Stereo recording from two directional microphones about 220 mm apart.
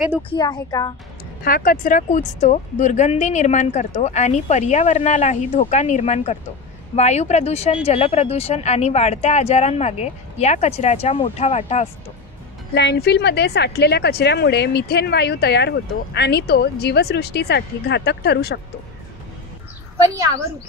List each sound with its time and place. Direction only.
0.3 s speech: 20° left (ahead or behind)
1.4 s speech: 40° left (ahead or behind)
12.7 s a woman's voice: 50° left (ahead or behind)